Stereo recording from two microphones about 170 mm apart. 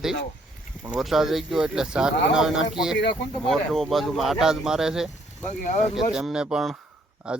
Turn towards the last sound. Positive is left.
turn(degrees=-5)  # may be behind; listen again after turning